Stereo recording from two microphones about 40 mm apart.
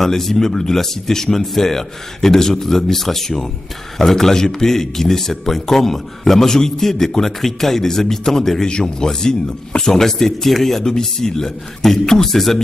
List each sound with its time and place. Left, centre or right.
0.0 s speech: centre